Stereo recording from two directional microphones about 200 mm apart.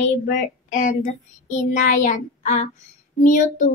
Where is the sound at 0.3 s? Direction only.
40° left (ahead or behind).